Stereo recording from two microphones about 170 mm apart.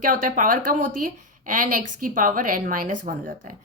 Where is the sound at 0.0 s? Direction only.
55° right (ahead or behind).